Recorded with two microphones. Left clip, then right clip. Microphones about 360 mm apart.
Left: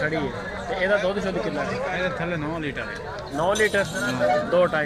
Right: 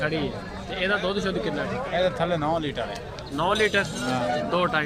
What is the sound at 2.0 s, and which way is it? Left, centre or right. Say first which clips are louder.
Speech: right 3 dB; centre.